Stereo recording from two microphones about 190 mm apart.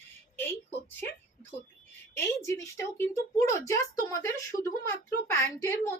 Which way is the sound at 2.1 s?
15° left (ahead or behind).